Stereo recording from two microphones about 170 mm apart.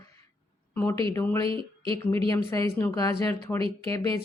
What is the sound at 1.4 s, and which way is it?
Speech, 30° right (ahead or behind).